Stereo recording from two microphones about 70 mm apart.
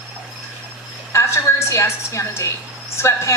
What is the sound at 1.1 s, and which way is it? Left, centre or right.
A woman's voice, left.